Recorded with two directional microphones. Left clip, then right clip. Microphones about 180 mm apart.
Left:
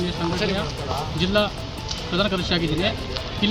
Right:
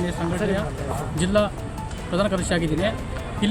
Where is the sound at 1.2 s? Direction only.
25° right (ahead or behind).